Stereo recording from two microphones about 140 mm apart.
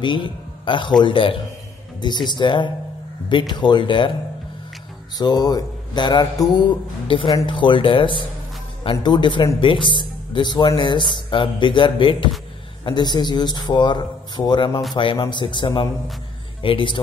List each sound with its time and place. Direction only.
0.0 s a man's voice: 35° left (ahead or behind)
5.1 s speech: 30° left (ahead or behind)